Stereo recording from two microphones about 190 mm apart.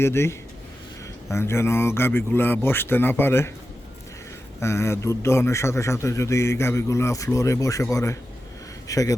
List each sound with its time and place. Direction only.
0.0 s a man's voice: 15° left (ahead or behind)
4.6 s a man's voice: 15° left (ahead or behind)